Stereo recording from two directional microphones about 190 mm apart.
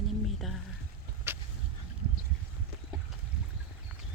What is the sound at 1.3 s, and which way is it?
Vehicle, 10° right (ahead or behind).